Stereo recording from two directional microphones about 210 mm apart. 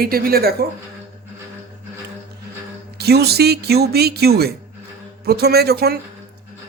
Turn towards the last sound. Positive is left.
turn(degrees=-50)  # may be behind; listen again after turning